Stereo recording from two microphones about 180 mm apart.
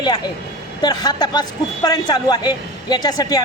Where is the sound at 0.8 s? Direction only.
20° left (ahead or behind).